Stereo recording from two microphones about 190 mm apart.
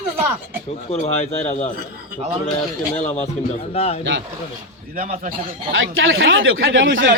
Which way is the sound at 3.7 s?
30° left (ahead or behind).